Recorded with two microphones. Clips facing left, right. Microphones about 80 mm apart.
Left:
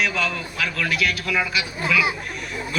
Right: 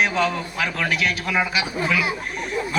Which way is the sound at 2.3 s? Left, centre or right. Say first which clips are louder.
Right 4 dB; right.